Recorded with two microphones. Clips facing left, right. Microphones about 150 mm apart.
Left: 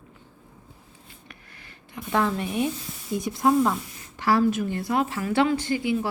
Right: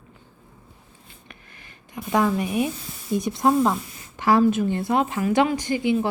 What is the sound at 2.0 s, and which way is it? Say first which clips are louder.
A woman's voice: right 3 dB; 15° right (ahead or behind).